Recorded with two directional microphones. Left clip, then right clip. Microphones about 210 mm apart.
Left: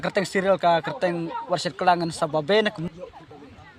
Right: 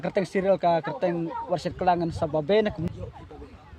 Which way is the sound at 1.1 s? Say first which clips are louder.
Left 1 dB; 40° left (ahead or behind).